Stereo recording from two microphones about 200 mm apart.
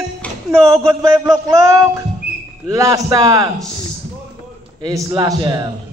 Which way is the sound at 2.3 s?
5° right (ahead or behind).